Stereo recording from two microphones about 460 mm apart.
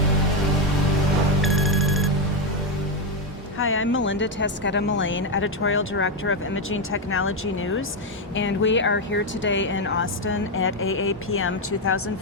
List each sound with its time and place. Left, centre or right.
1.4 s music: centre
3.6 s speech: left